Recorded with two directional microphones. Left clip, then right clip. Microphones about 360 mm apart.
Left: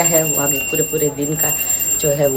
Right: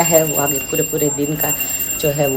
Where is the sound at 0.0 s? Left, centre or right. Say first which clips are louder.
Right 2 dB; centre.